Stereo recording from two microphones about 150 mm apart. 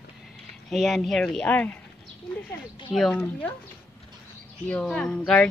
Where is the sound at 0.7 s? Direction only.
Centre (ahead or behind).